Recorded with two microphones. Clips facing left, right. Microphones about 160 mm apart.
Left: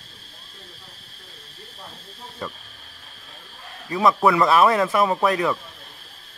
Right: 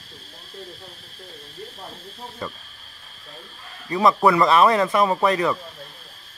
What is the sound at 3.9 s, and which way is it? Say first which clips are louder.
Speech: right 1 dB; centre (ahead or behind).